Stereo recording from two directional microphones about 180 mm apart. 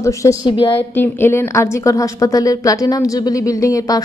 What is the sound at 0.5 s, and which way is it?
Speech, 30° left (ahead or behind).